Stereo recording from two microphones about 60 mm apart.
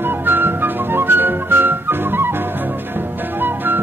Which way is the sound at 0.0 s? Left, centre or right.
Right.